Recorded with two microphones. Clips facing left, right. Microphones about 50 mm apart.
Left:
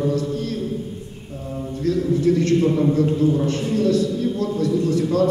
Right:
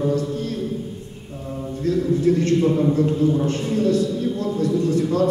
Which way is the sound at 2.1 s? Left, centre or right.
Right.